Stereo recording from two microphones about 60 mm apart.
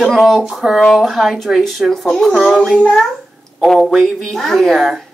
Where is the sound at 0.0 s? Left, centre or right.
Centre.